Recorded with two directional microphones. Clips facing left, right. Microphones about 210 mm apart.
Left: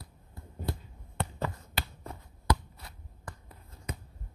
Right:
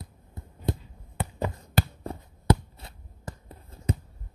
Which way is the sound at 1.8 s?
30° right (ahead or behind).